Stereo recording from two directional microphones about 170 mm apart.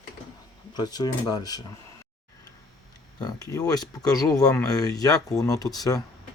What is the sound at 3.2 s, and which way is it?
Speech, 20° left (ahead or behind).